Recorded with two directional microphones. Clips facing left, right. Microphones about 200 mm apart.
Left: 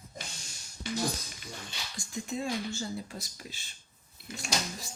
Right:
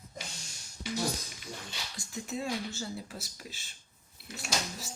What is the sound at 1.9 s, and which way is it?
Speech, 5° right (ahead or behind).